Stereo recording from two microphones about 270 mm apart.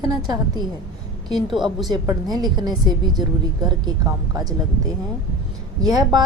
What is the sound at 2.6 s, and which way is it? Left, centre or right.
Speech, centre.